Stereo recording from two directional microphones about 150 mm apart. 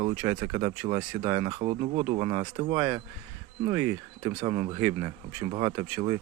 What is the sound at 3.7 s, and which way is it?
Speech, 15° right (ahead or behind).